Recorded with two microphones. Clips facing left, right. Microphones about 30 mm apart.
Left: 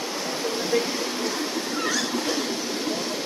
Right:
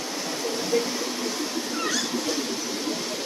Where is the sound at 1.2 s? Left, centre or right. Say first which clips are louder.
Left 2 dB; left.